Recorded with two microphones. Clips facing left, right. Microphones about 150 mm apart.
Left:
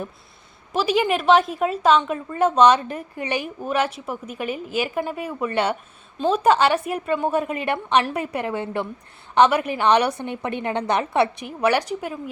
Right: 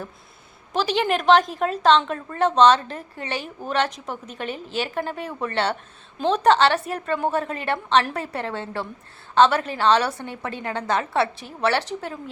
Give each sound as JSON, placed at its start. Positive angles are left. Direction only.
{"t": 0.7, "sound": "a woman's voice", "side_deg": 5}